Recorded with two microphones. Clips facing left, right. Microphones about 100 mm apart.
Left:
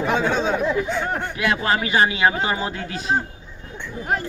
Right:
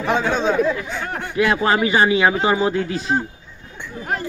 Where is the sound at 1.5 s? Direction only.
25° right (ahead or behind).